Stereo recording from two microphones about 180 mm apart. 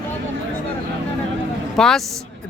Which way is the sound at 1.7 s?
Centre (ahead or behind).